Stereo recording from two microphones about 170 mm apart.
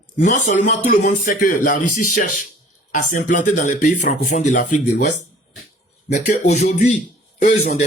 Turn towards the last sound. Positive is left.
turn(degrees=40)  # may be behind; listen again after turning